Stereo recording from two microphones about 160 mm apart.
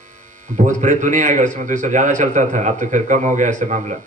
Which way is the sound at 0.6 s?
50° right (ahead or behind).